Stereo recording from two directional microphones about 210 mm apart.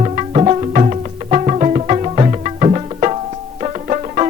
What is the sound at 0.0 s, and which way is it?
Music, 30° right (ahead or behind).